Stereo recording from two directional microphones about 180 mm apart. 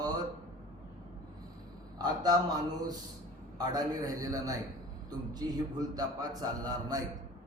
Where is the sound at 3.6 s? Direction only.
20° right (ahead or behind).